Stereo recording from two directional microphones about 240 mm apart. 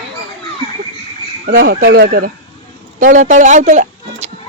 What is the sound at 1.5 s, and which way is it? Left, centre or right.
Speech, right.